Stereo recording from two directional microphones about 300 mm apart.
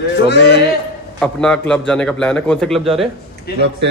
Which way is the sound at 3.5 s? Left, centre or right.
Left.